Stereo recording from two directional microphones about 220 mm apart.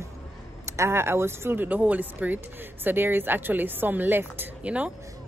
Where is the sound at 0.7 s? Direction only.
10° right (ahead or behind).